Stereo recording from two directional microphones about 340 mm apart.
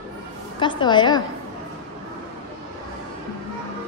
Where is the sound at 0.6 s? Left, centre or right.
Centre.